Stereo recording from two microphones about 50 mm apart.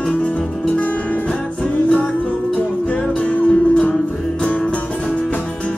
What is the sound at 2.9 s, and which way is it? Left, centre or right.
Music, left.